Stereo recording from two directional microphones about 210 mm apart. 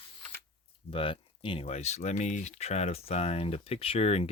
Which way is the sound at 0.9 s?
25° left (ahead or behind).